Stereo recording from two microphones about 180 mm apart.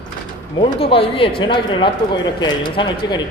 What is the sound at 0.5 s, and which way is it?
Speech, 30° left (ahead or behind).